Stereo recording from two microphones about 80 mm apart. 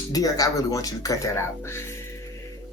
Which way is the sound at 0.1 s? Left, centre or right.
Left.